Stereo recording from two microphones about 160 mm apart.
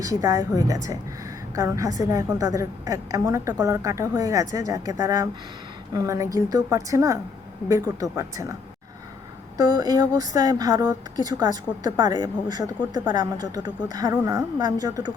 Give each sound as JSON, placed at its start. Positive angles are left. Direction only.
{"t": 0.0, "sound": "speech", "side_deg": -20}
{"t": 9.6, "sound": "speech", "side_deg": -25}